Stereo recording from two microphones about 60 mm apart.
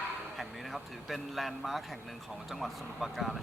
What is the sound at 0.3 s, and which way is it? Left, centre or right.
Speech, centre.